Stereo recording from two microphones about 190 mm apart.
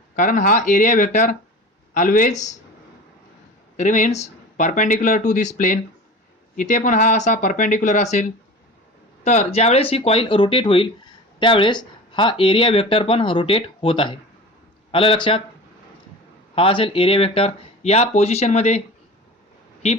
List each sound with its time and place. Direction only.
0.2 s speech: 45° left (ahead or behind)
3.8 s speech: 40° left (ahead or behind)
16.6 s speech: 30° left (ahead or behind)